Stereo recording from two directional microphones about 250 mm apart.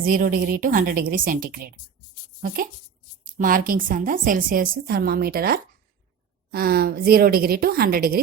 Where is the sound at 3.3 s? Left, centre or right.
Right.